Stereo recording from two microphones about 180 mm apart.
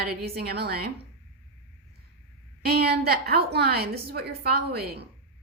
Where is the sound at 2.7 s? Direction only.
60° right (ahead or behind).